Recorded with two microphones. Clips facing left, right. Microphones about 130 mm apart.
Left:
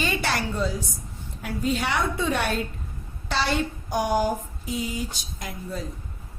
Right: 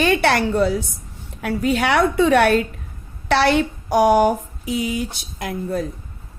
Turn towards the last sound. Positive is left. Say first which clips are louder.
# right 9 dB
turn(degrees=-60)  # may be behind; listen again after turning